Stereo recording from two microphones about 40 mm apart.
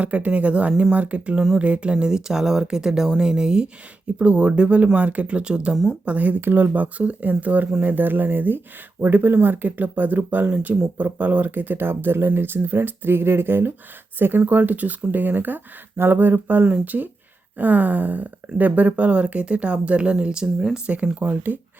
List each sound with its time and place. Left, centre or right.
0.0 s speech: right
2.0 s speech: centre
4.9 s speech: right
6.1 s speech: right
6.4 s speech: right
6.8 s speech: right
21.2 s speech: right